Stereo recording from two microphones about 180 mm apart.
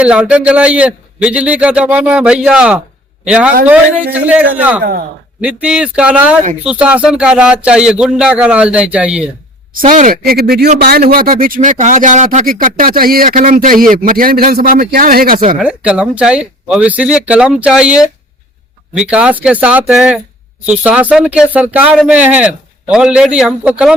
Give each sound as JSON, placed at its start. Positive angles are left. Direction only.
{"t": 0.0, "sound": "speech", "side_deg": -5}
{"t": 9.9, "sound": "speech", "side_deg": -50}
{"t": 15.5, "sound": "speech", "side_deg": -5}